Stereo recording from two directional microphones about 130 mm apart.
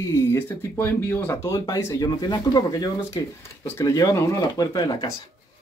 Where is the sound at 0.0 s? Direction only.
25° left (ahead or behind).